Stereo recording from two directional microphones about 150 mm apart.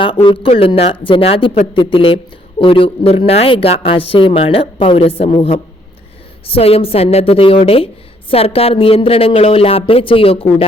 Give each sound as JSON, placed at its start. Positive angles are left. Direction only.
{"t": 0.0, "sound": "a woman's voice", "side_deg": 35}